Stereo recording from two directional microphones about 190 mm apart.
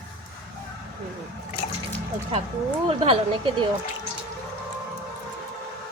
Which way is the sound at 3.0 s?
25° right (ahead or behind).